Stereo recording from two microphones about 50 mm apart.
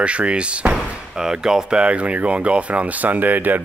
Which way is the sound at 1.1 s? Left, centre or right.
Centre.